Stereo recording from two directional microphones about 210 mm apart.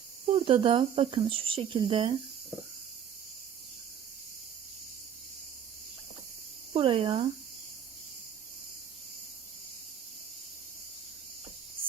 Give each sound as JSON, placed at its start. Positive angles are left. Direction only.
{"t": 0.3, "sound": "speech", "side_deg": -25}
{"t": 6.7, "sound": "speech", "side_deg": -25}